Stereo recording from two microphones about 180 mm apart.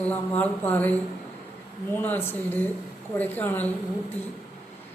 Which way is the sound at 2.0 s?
10° left (ahead or behind).